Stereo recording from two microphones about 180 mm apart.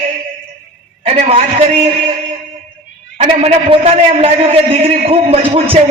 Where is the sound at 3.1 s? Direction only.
30° right (ahead or behind).